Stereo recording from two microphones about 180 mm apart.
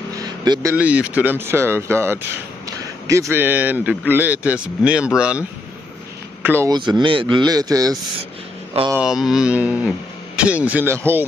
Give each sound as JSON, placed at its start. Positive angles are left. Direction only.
{"t": 0.2, "sound": "speech", "side_deg": -20}
{"t": 6.4, "sound": "speech", "side_deg": -10}
{"t": 6.7, "sound": "speech", "side_deg": -25}
{"t": 8.9, "sound": "speech", "side_deg": -5}